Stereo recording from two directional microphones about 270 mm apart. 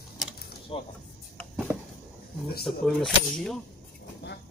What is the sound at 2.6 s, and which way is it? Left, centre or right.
Speech, centre.